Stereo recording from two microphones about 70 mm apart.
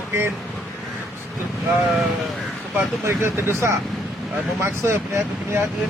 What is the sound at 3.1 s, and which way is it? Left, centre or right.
Speech, right.